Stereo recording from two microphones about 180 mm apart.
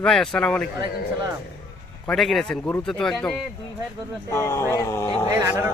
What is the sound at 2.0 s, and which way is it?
Speech, centre (ahead or behind).